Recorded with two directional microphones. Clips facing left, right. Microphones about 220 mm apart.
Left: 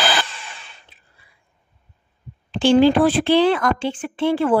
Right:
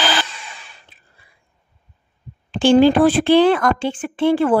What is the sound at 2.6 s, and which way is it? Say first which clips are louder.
Speech: right 2 dB; 50° right (ahead or behind).